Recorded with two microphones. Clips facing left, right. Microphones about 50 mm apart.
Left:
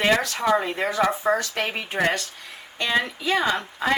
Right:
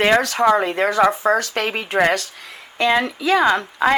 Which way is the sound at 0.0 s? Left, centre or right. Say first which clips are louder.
Right 6 dB; right.